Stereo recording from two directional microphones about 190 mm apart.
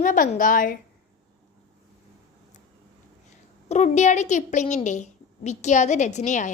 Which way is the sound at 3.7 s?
35° left (ahead or behind).